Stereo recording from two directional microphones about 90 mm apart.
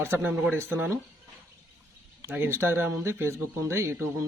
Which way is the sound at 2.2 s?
25° right (ahead or behind).